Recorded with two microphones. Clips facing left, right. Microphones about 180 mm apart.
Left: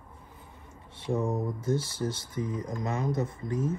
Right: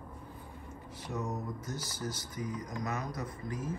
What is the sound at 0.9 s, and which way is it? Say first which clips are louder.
Speech: left 8 dB; 25° left (ahead or behind).